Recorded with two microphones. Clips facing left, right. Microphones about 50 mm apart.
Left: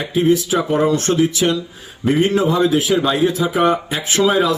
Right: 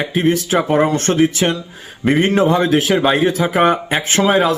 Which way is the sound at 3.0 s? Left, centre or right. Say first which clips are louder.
Right 2 dB; right.